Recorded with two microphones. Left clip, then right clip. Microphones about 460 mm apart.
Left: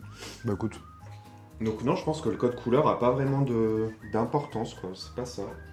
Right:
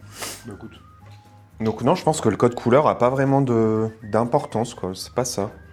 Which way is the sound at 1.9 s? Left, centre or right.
Right.